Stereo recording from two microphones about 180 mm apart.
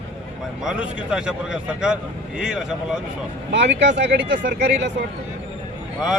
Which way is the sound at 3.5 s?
80° right.